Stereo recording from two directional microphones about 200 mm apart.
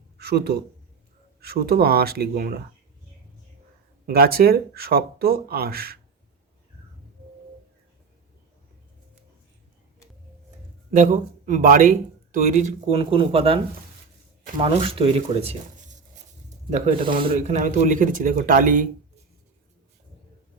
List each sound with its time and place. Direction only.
0.2 s a man's voice: 55° right (ahead or behind)
4.0 s speech: 50° right (ahead or behind)
10.9 s speech: 40° right (ahead or behind)
14.6 s speech: 25° right (ahead or behind)
17.3 s speech: 35° right (ahead or behind)